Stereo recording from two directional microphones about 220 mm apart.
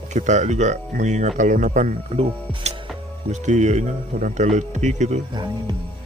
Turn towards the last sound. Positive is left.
turn(degrees=-30)  # may be behind; listen again after turning